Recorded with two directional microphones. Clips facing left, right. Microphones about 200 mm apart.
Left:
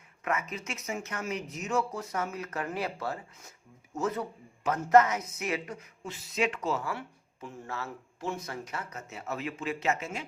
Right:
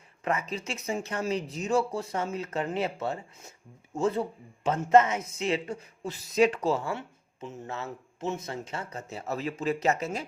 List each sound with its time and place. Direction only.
0.3 s speech: 30° right (ahead or behind)